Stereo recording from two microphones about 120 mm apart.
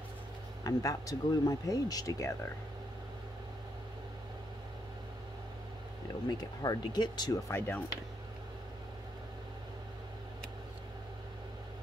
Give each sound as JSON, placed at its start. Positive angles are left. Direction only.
{"t": 0.7, "sound": "speech", "side_deg": 30}
{"t": 6.2, "sound": "speech", "side_deg": 35}
{"t": 7.5, "sound": "speech", "side_deg": 15}